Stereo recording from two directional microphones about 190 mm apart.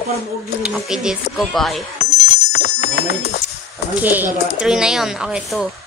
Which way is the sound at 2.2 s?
60° left (ahead or behind).